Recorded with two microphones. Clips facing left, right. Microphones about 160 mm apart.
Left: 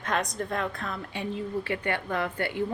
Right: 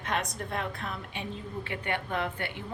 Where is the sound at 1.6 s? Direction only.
25° right (ahead or behind).